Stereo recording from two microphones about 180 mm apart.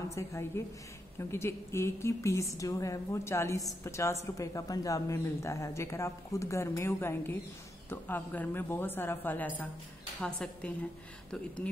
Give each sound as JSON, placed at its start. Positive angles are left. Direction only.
{"t": 0.1, "sound": "a woman's voice", "side_deg": 15}